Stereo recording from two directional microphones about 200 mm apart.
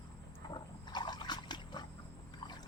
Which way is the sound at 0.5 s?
20° left (ahead or behind).